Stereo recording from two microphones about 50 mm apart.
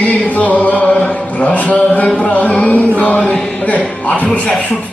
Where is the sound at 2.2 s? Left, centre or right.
Left.